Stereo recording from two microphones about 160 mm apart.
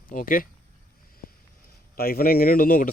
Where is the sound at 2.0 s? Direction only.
70° left (ahead or behind).